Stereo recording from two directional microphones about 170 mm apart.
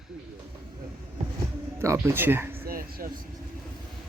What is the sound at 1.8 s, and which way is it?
Speech, 15° right (ahead or behind).